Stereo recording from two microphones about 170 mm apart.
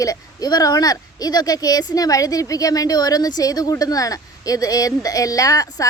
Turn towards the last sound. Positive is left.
turn(degrees=20)  # may be behind; listen again after turning